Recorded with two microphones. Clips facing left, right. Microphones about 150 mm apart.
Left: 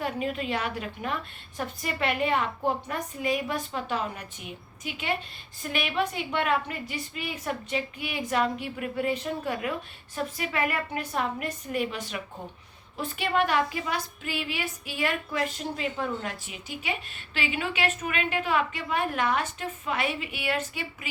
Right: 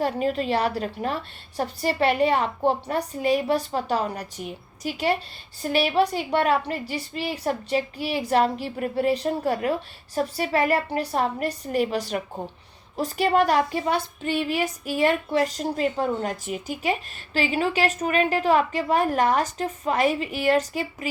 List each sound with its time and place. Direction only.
0.0 s a woman's voice: 35° right (ahead or behind)